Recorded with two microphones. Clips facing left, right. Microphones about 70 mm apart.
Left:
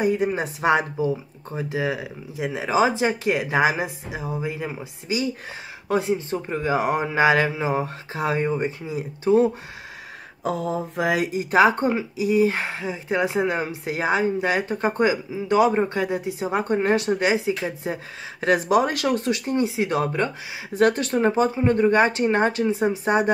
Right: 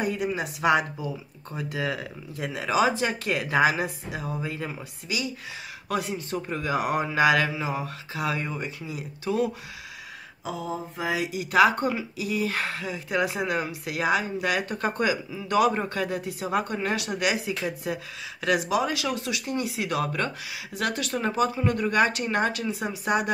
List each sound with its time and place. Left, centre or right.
0.0 s speech: left
0.3 s speech: left; by 4.8 s centre
5.0 s speech: left
10.4 s mantra: left
11.3 s speech: left